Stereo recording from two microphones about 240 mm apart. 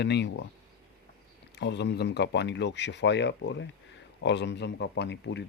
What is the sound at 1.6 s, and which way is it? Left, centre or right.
Speech, left.